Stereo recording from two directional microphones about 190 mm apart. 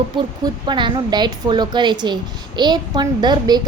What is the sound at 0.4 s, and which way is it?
A woman's voice, 25° right (ahead or behind).